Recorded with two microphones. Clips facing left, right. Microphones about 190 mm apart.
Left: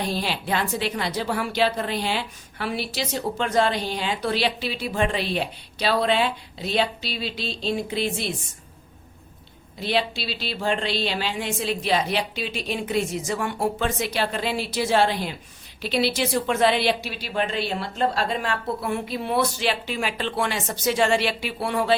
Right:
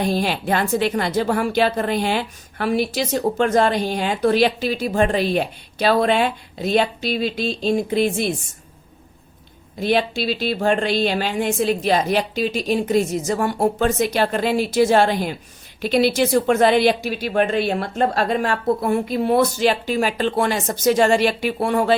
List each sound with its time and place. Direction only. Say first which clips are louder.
0.0 s speech: right 6 dB; 50° right (ahead or behind)
9.8 s speech: right 6 dB; 50° right (ahead or behind)